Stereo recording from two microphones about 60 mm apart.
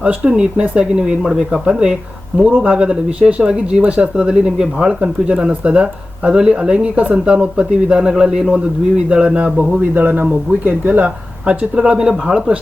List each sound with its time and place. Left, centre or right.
0.0 s speech: centre
9.9 s speech: right; by 12.5 s centre